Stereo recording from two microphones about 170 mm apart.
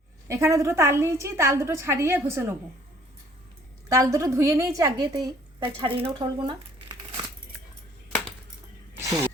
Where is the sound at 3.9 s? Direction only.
15° right (ahead or behind).